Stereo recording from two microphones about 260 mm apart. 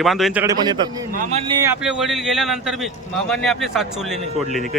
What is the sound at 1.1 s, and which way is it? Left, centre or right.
Speech, right.